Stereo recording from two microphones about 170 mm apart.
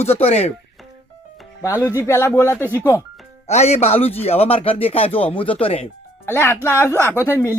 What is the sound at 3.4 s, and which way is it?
A man's voice, 40° left (ahead or behind).